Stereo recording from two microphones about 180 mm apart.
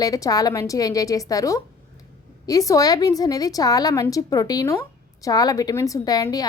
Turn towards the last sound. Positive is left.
turn(degrees=20)  # may be behind; listen again after turning